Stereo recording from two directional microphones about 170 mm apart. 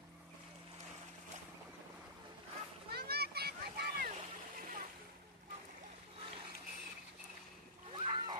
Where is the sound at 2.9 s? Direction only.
65° right (ahead or behind).